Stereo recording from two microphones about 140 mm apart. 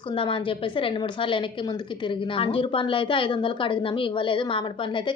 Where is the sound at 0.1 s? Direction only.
40° left (ahead or behind).